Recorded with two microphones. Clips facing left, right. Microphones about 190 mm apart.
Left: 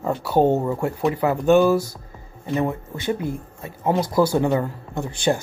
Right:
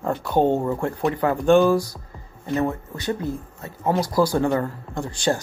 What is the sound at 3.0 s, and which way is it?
Speech, 15° left (ahead or behind).